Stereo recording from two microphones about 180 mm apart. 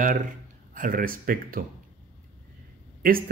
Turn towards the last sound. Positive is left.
turn(degrees=-50)  # may be behind; listen again after turning